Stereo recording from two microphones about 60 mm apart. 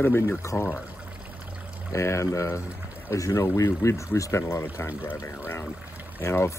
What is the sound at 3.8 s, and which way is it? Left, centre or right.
Speech, left.